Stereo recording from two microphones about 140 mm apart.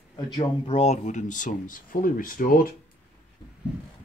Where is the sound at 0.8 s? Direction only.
55° left (ahead or behind); by 2.7 s 90° left.